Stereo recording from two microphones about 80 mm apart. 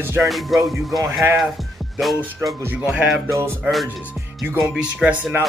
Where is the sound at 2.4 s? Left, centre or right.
Right.